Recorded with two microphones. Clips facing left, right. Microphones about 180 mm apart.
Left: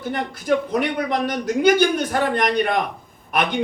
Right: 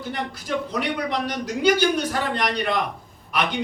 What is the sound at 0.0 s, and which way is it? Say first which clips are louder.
A man's voice: left 4 dB; 50° left (ahead or behind).